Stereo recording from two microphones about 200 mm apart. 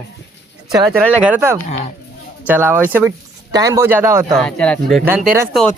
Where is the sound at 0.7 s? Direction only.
20° right (ahead or behind).